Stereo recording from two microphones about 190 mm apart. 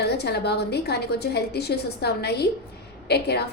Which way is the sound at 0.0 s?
60° left (ahead or behind).